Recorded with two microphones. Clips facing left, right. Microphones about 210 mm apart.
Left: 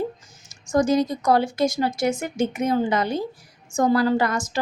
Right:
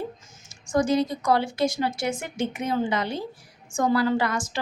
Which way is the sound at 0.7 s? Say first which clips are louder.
Left 3 dB; 40° left (ahead or behind).